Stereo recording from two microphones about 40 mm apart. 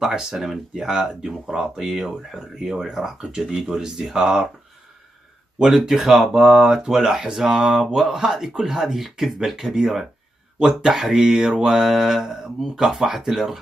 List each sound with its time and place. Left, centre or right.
0.1 s speech: centre
5.6 s speech: centre
11.7 s mantra: centre
12.7 s speech: centre